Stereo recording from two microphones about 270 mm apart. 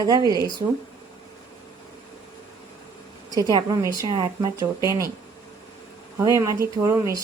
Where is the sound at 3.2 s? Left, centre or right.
Centre.